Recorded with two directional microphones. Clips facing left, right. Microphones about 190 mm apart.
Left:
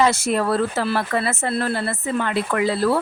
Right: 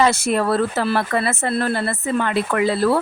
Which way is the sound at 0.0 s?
60° right (ahead or behind).